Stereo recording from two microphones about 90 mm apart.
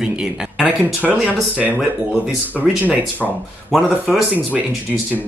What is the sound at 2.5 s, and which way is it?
Speech, 15° right (ahead or behind).